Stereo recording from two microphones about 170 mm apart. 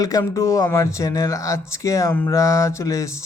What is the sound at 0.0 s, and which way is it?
Speech, 20° left (ahead or behind).